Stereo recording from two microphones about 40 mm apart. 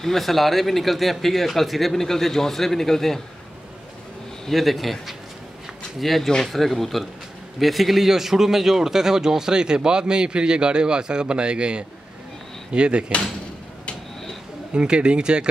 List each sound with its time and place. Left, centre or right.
0.0 s speech: centre
4.5 s a man's voice: centre; by 13.0 s right
14.7 s a man's voice: right